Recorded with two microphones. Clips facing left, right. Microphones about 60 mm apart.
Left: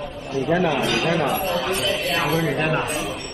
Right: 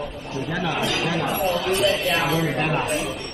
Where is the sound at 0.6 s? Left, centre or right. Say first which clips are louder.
Even; left.